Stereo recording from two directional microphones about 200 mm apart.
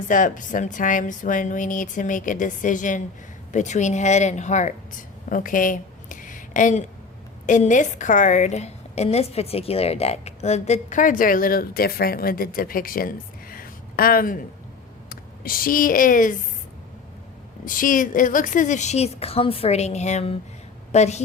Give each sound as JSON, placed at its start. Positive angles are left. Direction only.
{"t": 0.1, "sound": "a woman's voice", "side_deg": 40}
{"t": 17.7, "sound": "a woman's voice", "side_deg": 40}